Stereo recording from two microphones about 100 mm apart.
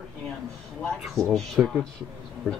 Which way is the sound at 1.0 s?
Centre (ahead or behind).